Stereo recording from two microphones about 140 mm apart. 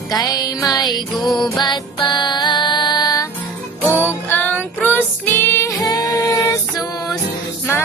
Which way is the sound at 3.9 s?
15° left (ahead or behind).